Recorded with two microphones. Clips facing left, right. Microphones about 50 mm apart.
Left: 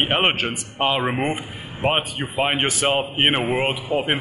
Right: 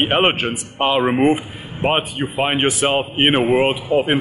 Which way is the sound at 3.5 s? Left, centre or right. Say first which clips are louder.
Right 6 dB; right.